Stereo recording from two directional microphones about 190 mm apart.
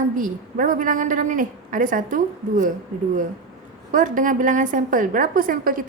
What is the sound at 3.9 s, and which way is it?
A woman's voice, 45° right (ahead or behind).